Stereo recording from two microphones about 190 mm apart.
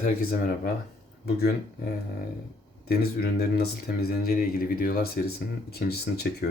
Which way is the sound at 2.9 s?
55° left (ahead or behind).